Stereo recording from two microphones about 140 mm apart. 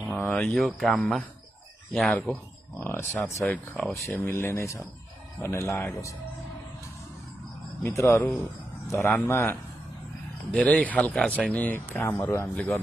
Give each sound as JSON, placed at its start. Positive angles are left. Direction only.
{"t": 0.1, "sound": "speech", "side_deg": 10}
{"t": 2.8, "sound": "speech", "side_deg": 20}
{"t": 7.8, "sound": "speech", "side_deg": 20}